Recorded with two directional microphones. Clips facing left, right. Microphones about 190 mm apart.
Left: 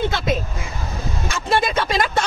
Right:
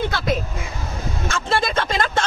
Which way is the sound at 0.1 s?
20° left (ahead or behind).